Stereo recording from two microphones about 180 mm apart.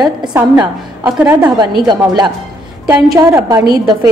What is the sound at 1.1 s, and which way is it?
Speech, 5° right (ahead or behind).